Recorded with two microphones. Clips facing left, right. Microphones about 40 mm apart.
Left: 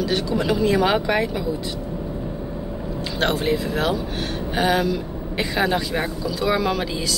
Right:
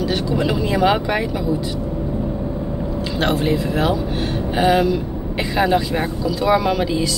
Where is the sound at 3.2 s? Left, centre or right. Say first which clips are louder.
Right 2 dB; centre.